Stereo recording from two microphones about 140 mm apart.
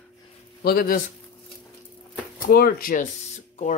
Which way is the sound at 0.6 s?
90° left.